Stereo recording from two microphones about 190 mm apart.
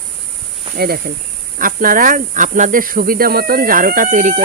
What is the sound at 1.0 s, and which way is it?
Speech, 45° right (ahead or behind).